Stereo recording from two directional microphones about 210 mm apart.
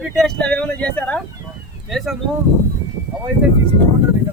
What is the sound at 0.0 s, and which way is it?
Speech, 5° left (ahead or behind).